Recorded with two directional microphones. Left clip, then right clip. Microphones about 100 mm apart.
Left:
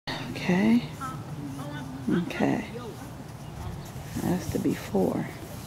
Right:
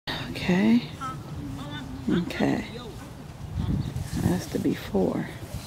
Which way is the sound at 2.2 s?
25° right (ahead or behind).